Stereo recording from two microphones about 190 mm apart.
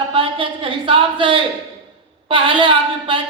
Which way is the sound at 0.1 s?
25° right (ahead or behind).